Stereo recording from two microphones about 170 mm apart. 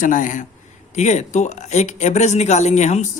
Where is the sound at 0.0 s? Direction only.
50° left (ahead or behind).